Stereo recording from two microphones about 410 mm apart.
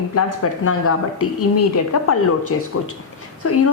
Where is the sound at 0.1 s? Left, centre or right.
Left.